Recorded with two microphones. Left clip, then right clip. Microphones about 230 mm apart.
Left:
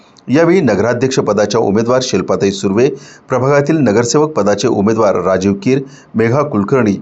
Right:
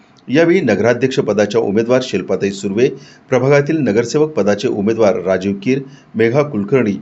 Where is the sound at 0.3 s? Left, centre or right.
Left.